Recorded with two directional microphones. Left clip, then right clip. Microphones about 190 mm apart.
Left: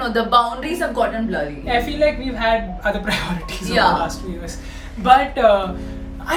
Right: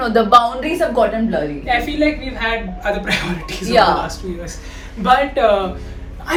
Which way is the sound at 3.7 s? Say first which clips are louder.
Right 3 dB; 5° right (ahead or behind).